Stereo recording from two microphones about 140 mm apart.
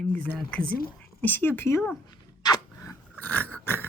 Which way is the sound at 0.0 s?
10° left (ahead or behind).